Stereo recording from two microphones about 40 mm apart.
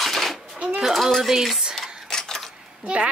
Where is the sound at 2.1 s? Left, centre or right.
Centre.